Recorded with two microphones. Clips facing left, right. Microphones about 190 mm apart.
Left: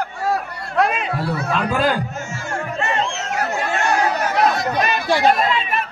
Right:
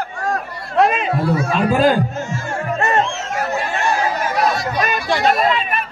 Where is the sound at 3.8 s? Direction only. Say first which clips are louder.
Left 1 dB; 70° left (ahead or behind).